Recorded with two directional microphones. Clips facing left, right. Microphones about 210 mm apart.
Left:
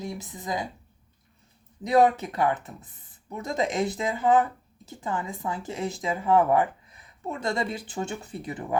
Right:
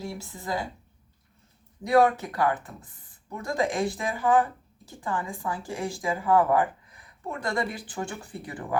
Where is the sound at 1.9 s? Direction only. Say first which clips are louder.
Even; 20° left (ahead or behind).